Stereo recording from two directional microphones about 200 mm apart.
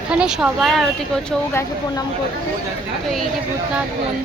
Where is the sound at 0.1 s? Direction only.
5° right (ahead or behind).